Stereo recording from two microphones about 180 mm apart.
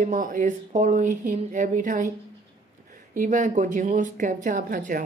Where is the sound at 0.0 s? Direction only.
50° right (ahead or behind).